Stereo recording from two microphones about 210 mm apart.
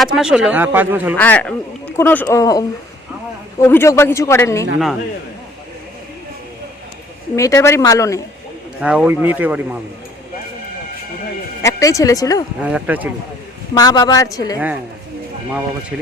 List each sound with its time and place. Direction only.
0.0 s speech: 5° right (ahead or behind)
1.1 s a man's voice: 5° left (ahead or behind)
7.3 s a man's voice: 15° left (ahead or behind)
8.8 s speech: 5° right (ahead or behind)
11.6 s a man's voice: 15° left (ahead or behind)
12.6 s speech: 5° right (ahead or behind)
13.7 s a man's voice: 20° left (ahead or behind)